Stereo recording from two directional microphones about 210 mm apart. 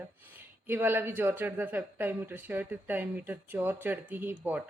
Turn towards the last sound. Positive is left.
turn(degrees=-10)  # may be behind; listen again after turning